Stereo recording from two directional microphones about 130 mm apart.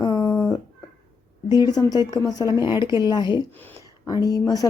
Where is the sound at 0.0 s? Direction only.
30° left (ahead or behind).